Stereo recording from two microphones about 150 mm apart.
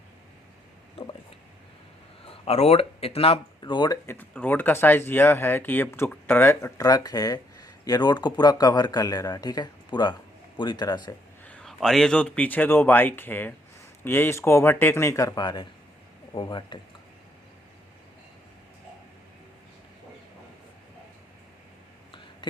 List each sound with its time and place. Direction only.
2.2 s speech: 40° left (ahead or behind)
4.0 s speech: 15° left (ahead or behind)
11.4 s speech: 5° left (ahead or behind)
15.4 s speech: 30° left (ahead or behind)